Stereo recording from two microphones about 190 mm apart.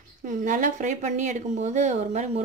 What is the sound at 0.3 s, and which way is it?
Speech, 40° right (ahead or behind).